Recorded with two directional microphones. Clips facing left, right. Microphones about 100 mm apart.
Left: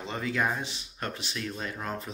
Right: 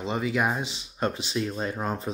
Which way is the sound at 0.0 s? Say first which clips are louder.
Right 4 dB; 15° right (ahead or behind).